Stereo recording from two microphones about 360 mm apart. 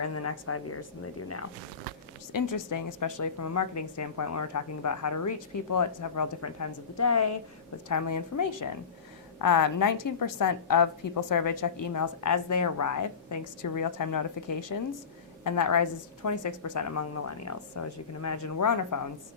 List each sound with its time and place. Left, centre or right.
0.0 s a woman's voice: left
2.3 s a woman's voice: left